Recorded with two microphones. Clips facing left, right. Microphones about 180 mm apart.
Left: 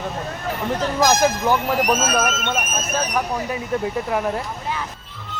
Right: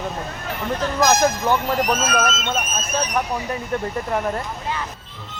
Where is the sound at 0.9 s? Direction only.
5° left (ahead or behind).